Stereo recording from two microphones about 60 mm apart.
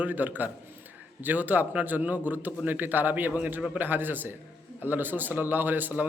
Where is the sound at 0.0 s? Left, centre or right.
Right.